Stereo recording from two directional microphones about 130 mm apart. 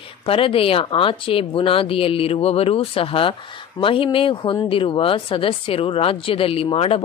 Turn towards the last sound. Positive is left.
turn(degrees=45)  # may be behind; listen again after turning